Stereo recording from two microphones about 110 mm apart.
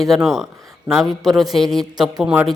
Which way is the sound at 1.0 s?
35° right (ahead or behind).